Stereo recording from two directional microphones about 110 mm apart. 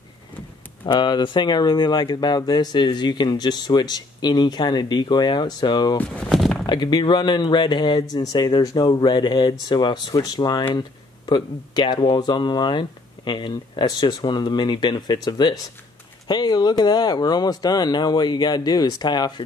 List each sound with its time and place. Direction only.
0.8 s speech: 45° left (ahead or behind)
5.9 s a sound: 10° left (ahead or behind)
6.6 s speech: 40° left (ahead or behind)